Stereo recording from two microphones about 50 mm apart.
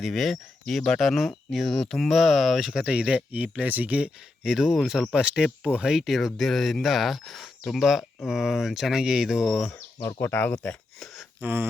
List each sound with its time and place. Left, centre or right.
0.0 s speech: centre
2.9 s speech: centre
3.3 s speech: right
4.4 s speech: centre
10.2 s speech: left
10.5 s speech: left
11.3 s speech: right